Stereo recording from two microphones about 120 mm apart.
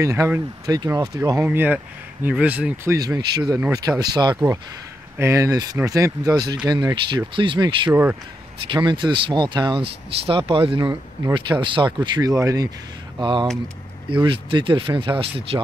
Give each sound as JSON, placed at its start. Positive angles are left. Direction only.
{"t": 0.0, "sound": "speech", "side_deg": -25}
{"t": 2.9, "sound": "speech", "side_deg": -25}
{"t": 7.9, "sound": "speech", "side_deg": -15}
{"t": 8.6, "sound": "speech", "side_deg": -40}
{"t": 13.2, "sound": "speech", "side_deg": -40}